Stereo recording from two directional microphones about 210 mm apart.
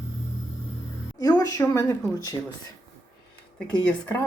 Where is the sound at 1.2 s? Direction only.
15° left (ahead or behind).